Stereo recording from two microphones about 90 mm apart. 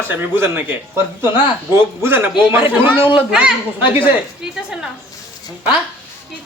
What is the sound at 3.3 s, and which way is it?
A woman's voice, 10° right (ahead or behind).